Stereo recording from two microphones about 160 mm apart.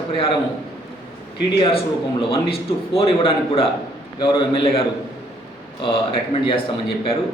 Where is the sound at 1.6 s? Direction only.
35° left (ahead or behind).